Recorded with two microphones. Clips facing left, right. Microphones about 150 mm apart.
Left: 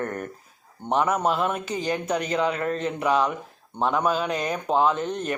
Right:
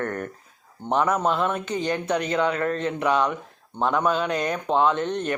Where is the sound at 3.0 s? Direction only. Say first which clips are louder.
Even; 5° left (ahead or behind).